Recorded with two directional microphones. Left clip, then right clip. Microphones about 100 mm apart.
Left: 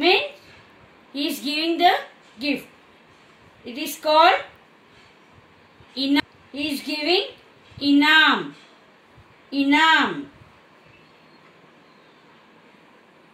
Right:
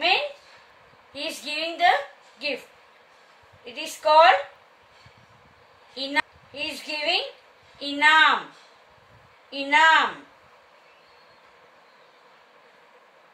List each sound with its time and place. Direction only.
1.1 s a woman's voice: 15° right (ahead or behind)
3.6 s a woman's voice: 15° right (ahead or behind)
5.9 s a woman's voice: 15° right (ahead or behind)
9.5 s a woman's voice: 15° right (ahead or behind)